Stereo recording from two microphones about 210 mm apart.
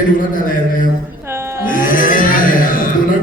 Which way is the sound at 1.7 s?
40° left (ahead or behind).